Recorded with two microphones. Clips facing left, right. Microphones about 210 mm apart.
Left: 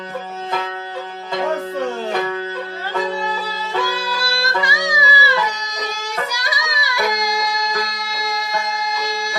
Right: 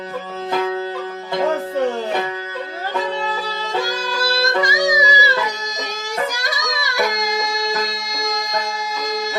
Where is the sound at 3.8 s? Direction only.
45° right (ahead or behind).